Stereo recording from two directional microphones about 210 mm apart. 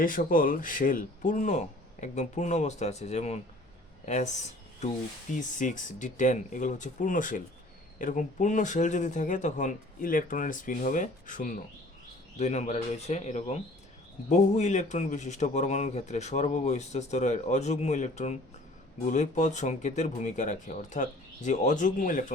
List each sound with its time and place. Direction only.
0.0 s speech: 40° left (ahead or behind)